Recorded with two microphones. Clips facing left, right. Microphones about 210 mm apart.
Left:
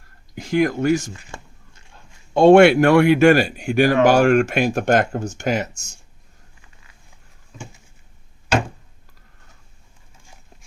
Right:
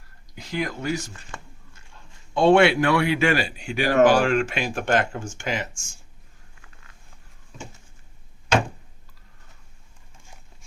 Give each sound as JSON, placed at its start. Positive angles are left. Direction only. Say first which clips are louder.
{"t": 0.3, "sound": "speech", "louder": "left 10 dB", "side_deg": 50}
{"t": 2.3, "sound": "speech", "louder": "left 6 dB", "side_deg": 45}